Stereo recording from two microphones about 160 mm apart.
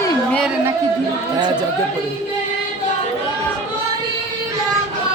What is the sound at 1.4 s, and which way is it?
Speech, 25° right (ahead or behind).